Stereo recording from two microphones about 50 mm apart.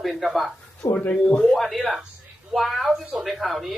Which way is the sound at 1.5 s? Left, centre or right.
Centre.